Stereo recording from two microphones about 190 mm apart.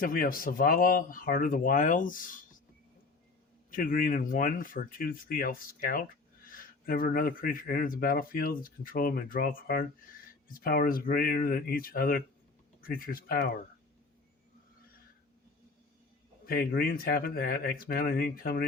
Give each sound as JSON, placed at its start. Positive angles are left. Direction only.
{"t": 0.0, "sound": "speech", "side_deg": 50}
{"t": 3.7, "sound": "speech", "side_deg": 45}
{"t": 16.5, "sound": "speech", "side_deg": 50}